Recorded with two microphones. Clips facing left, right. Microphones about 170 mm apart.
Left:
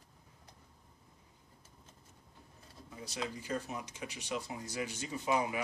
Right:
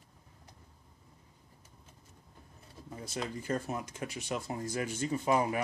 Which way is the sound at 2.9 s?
50° right (ahead or behind).